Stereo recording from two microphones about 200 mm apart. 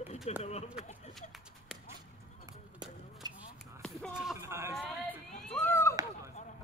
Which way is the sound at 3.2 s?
20° right (ahead or behind).